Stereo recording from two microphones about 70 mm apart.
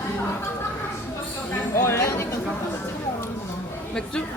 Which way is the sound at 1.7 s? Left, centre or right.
Left.